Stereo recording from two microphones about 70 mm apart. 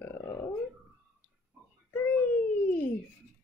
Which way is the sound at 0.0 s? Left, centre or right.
Left.